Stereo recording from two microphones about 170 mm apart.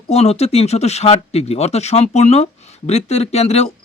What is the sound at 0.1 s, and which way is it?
A man's voice, 40° left (ahead or behind).